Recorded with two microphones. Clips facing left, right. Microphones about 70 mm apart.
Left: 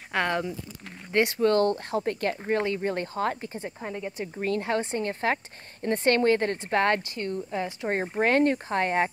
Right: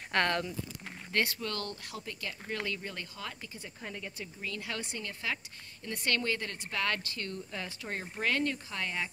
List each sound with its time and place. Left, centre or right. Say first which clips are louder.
0.1 s speech: left 3 dB; centre
1.4 s a woman's voice: left 16 dB; left
2.5 s a woman's voice: left 10 dB; left
4.4 s a woman's voice: left 13 dB; left
7.0 s a woman's voice: left 8 dB; left